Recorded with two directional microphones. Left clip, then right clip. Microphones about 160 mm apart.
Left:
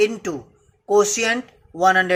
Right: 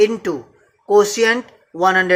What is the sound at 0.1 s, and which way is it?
Speech, 25° left (ahead or behind).